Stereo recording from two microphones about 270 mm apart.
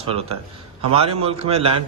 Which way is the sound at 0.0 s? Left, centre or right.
Right.